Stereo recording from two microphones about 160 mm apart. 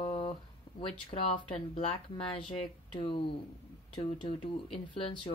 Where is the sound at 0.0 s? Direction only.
35° left (ahead or behind).